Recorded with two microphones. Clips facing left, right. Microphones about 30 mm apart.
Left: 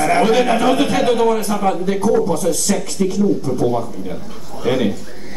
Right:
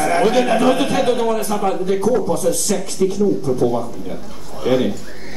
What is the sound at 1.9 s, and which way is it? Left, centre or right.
Speech, left.